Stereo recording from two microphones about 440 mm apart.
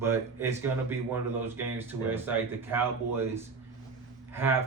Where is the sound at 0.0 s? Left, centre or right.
Centre.